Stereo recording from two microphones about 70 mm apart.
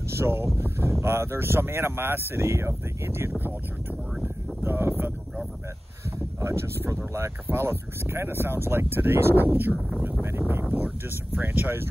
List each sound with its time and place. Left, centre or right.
0.1 s speech: right
4.2 s a sound: right
6.4 s speech: right
11.3 s speech: right